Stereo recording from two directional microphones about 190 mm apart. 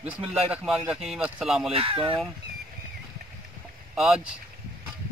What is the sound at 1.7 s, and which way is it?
Speech, 30° right (ahead or behind).